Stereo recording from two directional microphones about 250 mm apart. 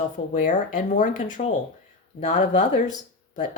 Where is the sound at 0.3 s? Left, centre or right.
Left.